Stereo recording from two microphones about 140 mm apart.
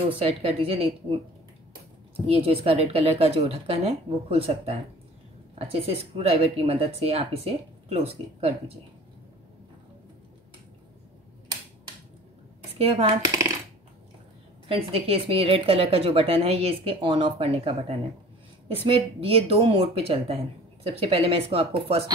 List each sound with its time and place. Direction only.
0.1 s a woman's voice: 45° right (ahead or behind)
2.2 s a woman's voice: 45° right (ahead or behind)
12.7 s a woman's voice: 45° right (ahead or behind)
14.7 s a woman's voice: 45° right (ahead or behind)